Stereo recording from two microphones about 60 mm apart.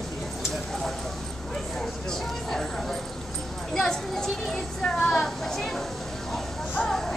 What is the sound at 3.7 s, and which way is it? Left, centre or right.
A child's voice, centre.